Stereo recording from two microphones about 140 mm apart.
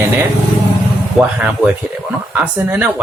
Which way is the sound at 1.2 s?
Centre (ahead or behind).